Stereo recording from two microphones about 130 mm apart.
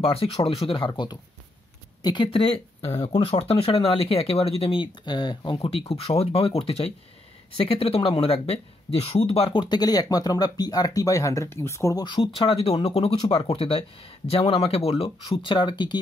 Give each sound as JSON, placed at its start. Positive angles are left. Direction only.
{"t": 0.0, "sound": "speech", "side_deg": 45}